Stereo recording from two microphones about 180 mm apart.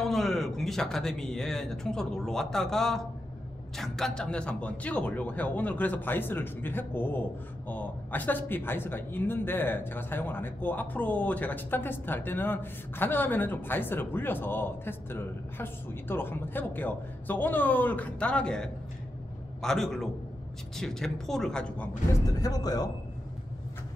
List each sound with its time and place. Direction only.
0.0 s speech: centre (ahead or behind)
22.1 s speech: 20° left (ahead or behind)